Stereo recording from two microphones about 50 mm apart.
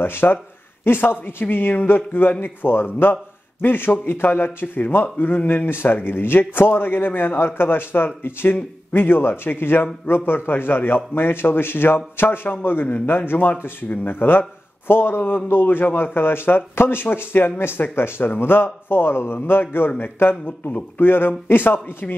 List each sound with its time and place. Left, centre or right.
0.0 s a man's voice: left